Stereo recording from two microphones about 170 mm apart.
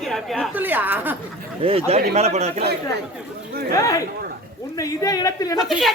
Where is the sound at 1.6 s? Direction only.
35° right (ahead or behind).